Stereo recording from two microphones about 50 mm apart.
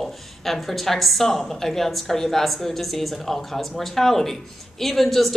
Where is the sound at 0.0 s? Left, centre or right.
Centre.